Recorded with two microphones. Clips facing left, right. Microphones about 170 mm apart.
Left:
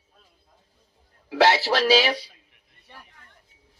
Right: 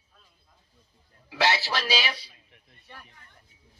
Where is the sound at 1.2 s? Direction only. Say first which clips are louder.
Left 7 dB; 65° left (ahead or behind); by 2.2 s 85° left.